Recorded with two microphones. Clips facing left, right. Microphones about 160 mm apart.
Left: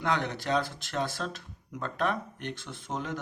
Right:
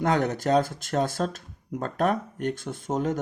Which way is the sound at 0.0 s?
45° right (ahead or behind).